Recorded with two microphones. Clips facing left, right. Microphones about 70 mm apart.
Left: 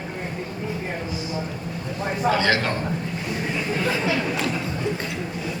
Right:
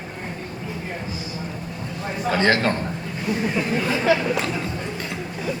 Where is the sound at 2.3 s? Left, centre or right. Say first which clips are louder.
Right 6 dB; right.